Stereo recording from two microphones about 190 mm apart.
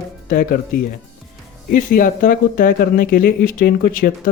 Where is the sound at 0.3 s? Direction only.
50° left (ahead or behind).